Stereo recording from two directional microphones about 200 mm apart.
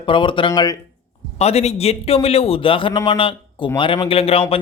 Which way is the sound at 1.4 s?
30° left (ahead or behind).